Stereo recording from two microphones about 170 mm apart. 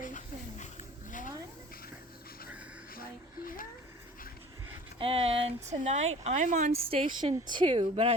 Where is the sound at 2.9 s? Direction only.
60° left (ahead or behind).